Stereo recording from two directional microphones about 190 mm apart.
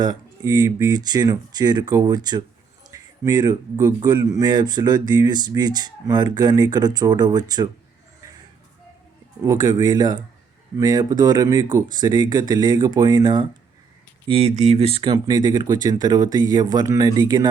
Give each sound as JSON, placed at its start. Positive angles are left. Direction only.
{"t": 0.0, "sound": "speech", "side_deg": -20}
{"t": 9.4, "sound": "speech", "side_deg": -20}